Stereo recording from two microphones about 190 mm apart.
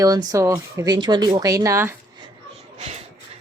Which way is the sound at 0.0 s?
20° right (ahead or behind).